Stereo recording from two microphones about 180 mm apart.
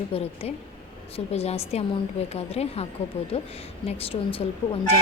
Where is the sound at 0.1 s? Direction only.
35° left (ahead or behind).